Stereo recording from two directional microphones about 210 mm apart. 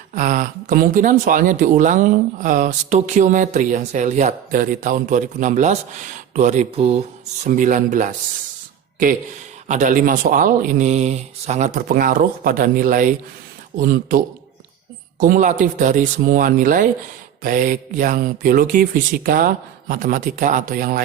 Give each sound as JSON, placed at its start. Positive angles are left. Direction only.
{"t": 0.1, "sound": "speech", "side_deg": -40}
{"t": 9.6, "sound": "speech", "side_deg": -35}
{"t": 15.2, "sound": "speech", "side_deg": -40}